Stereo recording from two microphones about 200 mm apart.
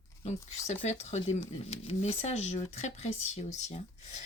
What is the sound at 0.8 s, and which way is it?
Speech, 35° left (ahead or behind).